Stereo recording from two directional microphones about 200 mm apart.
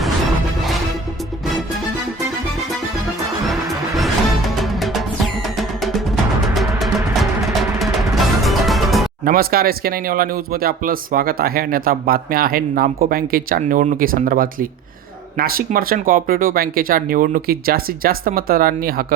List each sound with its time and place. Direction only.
3.4 s music: centre (ahead or behind)
6.5 s music: centre (ahead or behind)
9.2 s speech: 50° right (ahead or behind)